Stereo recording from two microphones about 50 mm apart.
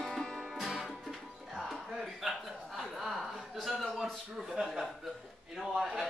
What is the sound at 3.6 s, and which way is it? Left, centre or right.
Chuckle, centre.